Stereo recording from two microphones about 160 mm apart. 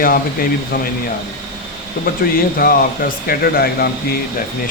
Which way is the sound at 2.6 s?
65° left (ahead or behind).